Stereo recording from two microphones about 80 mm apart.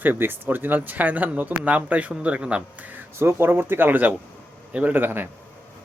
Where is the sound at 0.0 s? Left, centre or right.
Right.